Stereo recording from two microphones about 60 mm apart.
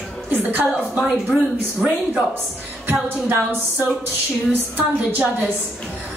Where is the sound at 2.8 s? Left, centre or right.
Right.